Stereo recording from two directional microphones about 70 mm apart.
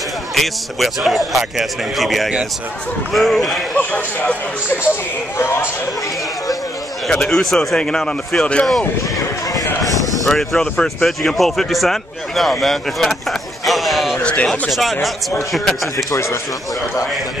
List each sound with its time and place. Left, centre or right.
0.3 s a man's voice: centre
3.7 s speech: centre
5.4 s speech: left
7.1 s a man's voice: centre
10.2 s speech: centre
14.3 s speech: centre
14.7 s a man's voice: centre